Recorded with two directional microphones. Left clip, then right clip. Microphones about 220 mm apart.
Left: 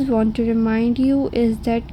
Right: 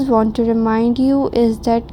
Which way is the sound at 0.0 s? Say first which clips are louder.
Right 5 dB; 20° right (ahead or behind).